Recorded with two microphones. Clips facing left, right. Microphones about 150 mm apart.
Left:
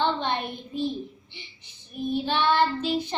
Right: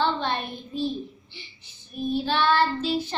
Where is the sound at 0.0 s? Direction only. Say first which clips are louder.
Even; 20° left (ahead or behind).